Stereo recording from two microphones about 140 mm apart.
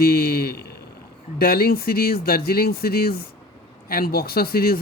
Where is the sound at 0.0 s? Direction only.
90° left.